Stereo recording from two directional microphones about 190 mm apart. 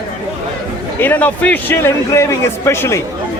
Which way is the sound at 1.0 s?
10° left (ahead or behind).